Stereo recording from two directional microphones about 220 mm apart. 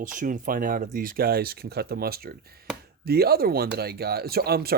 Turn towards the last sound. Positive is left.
turn(degrees=-45)  # may be behind; listen again after turning